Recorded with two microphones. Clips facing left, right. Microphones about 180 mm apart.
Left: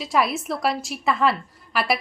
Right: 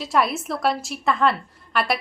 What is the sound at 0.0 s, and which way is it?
A woman's voice, centre (ahead or behind).